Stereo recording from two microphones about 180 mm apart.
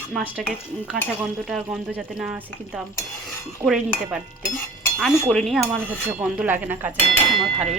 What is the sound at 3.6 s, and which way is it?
Cutlery, centre (ahead or behind).